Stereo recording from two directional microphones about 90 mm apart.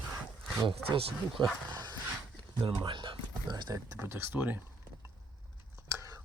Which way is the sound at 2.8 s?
65° right (ahead or behind).